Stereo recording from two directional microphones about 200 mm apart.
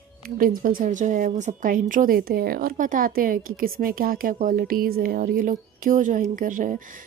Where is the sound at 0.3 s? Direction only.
45° right (ahead or behind).